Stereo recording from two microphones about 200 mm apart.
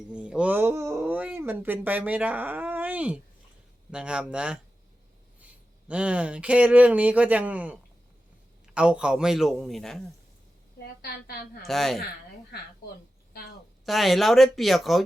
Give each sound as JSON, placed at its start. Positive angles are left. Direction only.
{"t": 0.1, "sound": "a man's voice", "side_deg": -5}
{"t": 5.9, "sound": "a man's voice", "side_deg": -5}
{"t": 11.6, "sound": "a man's voice", "side_deg": 0}
{"t": 13.8, "sound": "a man's voice", "side_deg": 0}